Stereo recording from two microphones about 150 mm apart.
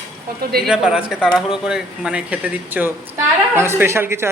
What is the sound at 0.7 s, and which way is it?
A woman's voice, 5° right (ahead or behind).